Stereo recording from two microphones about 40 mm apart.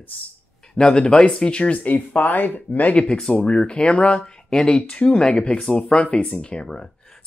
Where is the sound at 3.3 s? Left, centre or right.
Left.